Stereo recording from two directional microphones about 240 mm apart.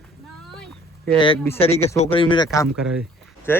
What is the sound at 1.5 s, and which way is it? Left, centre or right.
A man's voice, left.